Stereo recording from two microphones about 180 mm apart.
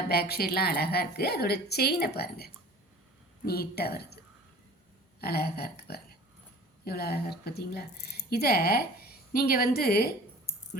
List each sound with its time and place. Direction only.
0.1 s a woman's voice: 60° left (ahead or behind)
5.2 s a woman's voice: 60° left (ahead or behind)